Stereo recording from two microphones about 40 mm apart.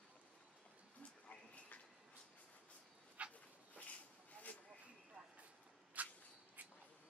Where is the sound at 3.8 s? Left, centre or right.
Left.